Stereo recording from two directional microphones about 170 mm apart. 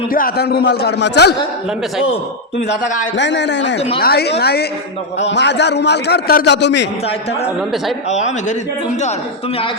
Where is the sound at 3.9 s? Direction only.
65° left (ahead or behind).